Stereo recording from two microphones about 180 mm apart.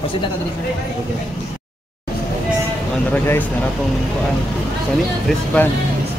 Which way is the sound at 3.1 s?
10° left (ahead or behind).